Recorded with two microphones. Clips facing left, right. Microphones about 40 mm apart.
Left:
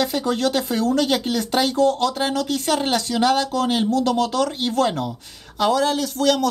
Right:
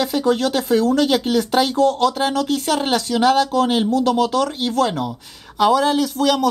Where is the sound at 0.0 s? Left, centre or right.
Centre.